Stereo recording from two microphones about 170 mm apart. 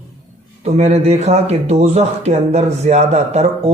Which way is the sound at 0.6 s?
40° right (ahead or behind).